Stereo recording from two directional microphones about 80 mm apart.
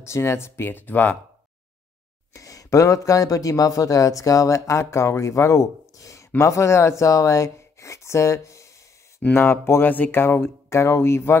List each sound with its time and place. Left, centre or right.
0.0 s speech: left
2.3 s speech: left
9.3 s speech: left